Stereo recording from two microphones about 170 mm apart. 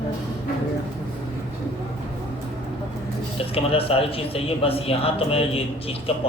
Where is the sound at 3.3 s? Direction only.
35° left (ahead or behind).